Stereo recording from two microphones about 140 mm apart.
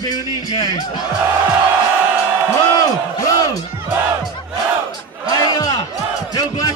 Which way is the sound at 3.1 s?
25° left (ahead or behind).